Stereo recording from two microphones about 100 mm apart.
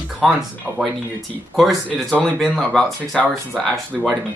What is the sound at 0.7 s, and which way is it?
Speech, 15° right (ahead or behind).